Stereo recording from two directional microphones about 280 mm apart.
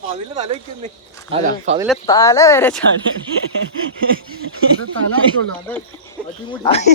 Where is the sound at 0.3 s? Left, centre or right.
Right.